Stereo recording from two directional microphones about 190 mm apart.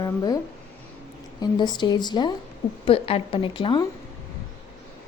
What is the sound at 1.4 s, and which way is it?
A woman's voice, 20° left (ahead or behind).